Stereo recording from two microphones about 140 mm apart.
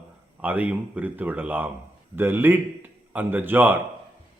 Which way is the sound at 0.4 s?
10° right (ahead or behind).